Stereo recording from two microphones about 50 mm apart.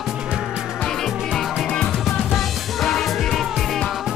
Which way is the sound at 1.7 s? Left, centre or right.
Centre.